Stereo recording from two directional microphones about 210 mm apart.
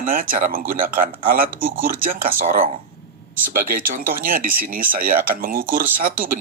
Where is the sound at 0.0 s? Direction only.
40° right (ahead or behind).